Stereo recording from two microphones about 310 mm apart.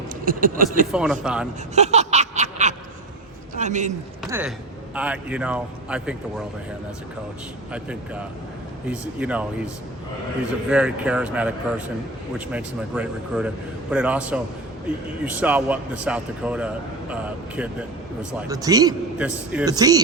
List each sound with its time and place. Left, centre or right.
0.3 s speech: right
0.9 s a man's voice: centre
1.7 s a sound: right
3.5 s a man's voice: right
4.2 s a man's voice: centre
7.7 s a man's voice: centre
10.7 s a man's voice: centre
18.4 s a man's voice: centre